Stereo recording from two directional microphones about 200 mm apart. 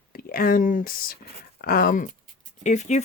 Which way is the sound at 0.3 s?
45° left (ahead or behind).